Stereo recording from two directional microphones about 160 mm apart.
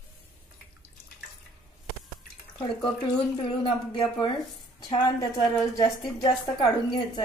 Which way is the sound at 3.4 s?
35° left (ahead or behind).